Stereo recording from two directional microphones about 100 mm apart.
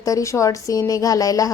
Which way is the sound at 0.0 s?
35° left (ahead or behind).